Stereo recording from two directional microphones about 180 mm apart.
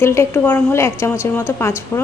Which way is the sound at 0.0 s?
15° left (ahead or behind).